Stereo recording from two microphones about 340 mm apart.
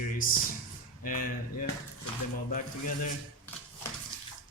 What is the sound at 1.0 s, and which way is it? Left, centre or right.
Speech, left.